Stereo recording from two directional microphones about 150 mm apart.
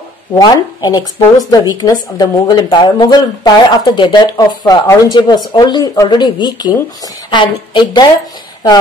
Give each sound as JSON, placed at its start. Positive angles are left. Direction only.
{"t": 0.3, "sound": "a woman's voice", "side_deg": 25}